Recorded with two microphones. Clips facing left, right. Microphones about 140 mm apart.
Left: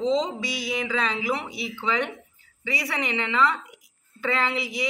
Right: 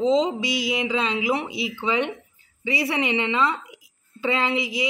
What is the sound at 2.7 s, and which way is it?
Speech, 25° right (ahead or behind).